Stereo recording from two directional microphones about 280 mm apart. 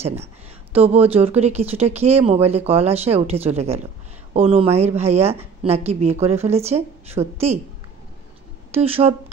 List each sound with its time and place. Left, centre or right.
0.7 s speech: right
8.7 s speech: right